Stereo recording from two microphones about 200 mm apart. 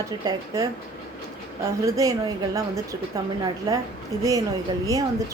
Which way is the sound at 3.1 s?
15° right (ahead or behind).